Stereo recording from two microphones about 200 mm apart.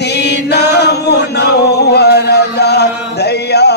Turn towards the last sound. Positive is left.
turn(degrees=55)  # may be behind; listen again after turning